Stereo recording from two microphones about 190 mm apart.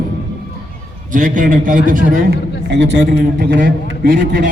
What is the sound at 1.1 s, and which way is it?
A man's voice, 45° right (ahead or behind).